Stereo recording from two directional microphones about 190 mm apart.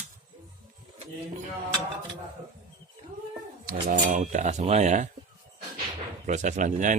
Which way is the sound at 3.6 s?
45° right (ahead or behind).